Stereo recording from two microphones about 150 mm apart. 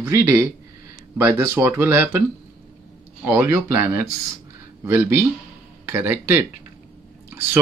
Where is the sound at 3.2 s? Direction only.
15° right (ahead or behind).